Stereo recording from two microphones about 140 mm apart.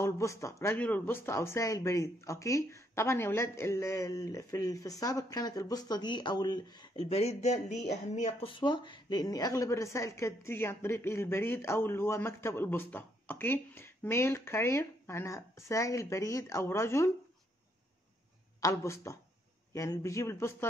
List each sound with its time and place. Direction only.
0.0 s a woman's voice: 20° left (ahead or behind)
7.0 s speech: 45° left (ahead or behind)
8.5 s a woman's voice: 35° left (ahead or behind); by 17.1 s 20° left (ahead or behind)
18.6 s a woman's voice: 20° left (ahead or behind)